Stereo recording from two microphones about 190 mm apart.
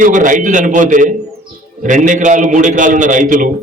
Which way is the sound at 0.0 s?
40° right (ahead or behind).